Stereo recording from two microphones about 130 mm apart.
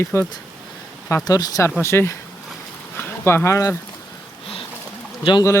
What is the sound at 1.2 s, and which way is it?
Speech, 30° left (ahead or behind).